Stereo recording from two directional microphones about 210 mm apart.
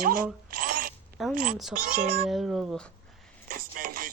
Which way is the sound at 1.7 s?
35° right (ahead or behind).